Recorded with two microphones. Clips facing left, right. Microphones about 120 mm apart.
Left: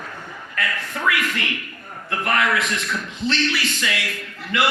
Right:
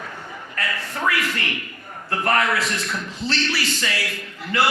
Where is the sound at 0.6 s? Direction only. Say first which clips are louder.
Even; 30° right (ahead or behind).